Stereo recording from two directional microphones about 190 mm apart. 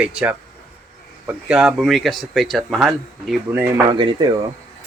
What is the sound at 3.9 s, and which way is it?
Speech, 25° right (ahead or behind).